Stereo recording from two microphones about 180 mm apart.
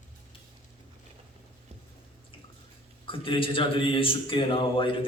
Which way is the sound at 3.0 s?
30° left (ahead or behind).